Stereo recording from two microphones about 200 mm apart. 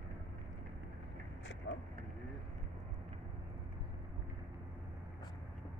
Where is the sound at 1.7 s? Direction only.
65° left (ahead or behind).